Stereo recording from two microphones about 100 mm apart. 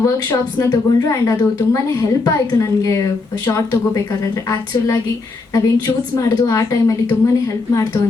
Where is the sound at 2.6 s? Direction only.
30° left (ahead or behind).